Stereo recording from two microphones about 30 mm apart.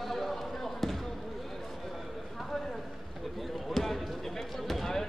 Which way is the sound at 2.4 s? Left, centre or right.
Centre.